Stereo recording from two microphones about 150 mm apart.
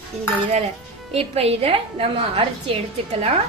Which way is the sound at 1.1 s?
40° right (ahead or behind).